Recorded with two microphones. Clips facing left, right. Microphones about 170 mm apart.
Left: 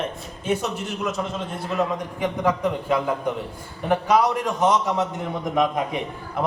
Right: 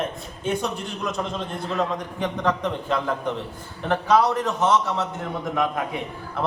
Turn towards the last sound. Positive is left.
turn(degrees=20)  # may be behind; listen again after turning